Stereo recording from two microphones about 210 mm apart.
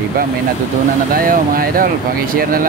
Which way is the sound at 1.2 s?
45° right (ahead or behind).